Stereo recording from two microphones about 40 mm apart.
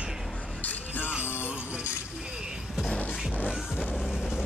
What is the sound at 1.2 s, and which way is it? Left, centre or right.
Music, left.